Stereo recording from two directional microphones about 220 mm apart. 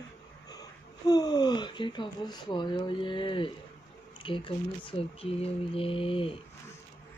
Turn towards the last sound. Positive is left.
turn(degrees=25)  # may be behind; listen again after turning